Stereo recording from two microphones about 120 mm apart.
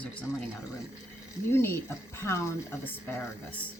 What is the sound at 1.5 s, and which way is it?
A woman's voice, 20° left (ahead or behind).